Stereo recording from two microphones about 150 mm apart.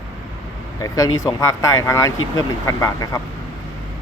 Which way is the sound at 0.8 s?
20° left (ahead or behind).